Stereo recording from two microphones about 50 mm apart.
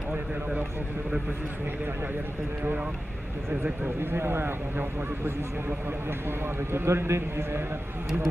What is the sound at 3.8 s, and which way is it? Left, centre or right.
A man's voice, right.